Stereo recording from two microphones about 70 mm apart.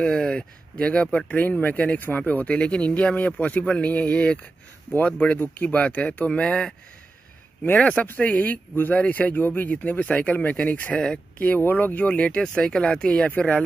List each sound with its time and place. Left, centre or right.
0.0 s speech: centre
7.7 s speech: centre